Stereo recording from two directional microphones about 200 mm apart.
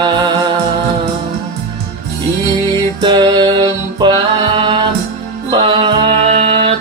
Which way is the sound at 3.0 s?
20° right (ahead or behind).